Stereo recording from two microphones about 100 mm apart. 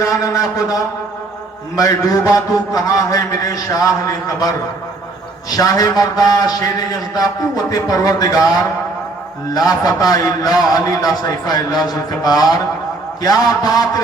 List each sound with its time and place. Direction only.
0.0 s a man's voice: 35° left (ahead or behind)